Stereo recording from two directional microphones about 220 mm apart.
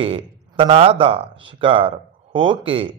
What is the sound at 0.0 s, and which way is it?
A man's voice, 25° right (ahead or behind).